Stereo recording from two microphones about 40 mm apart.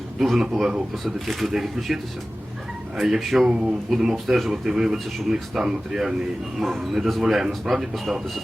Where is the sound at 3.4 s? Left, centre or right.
Right.